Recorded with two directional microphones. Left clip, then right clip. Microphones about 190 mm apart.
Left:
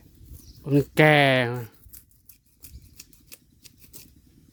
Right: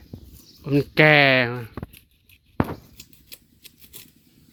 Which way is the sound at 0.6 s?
20° left (ahead or behind).